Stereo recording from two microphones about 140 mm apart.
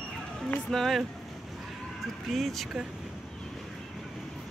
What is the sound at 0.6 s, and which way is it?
Speech, 5° left (ahead or behind).